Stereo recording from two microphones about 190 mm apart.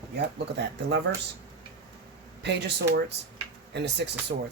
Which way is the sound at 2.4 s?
65° right (ahead or behind).